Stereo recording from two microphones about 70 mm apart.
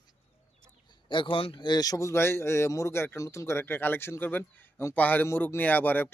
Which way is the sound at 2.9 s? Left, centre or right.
Left.